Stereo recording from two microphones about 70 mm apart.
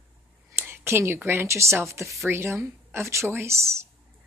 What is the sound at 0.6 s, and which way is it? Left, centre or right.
A woman's voice, right.